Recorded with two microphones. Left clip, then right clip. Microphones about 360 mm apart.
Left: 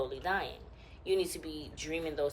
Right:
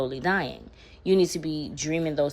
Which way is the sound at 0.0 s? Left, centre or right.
Centre.